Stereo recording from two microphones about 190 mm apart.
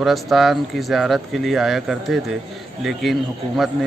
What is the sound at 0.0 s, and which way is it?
Speech, centre (ahead or behind).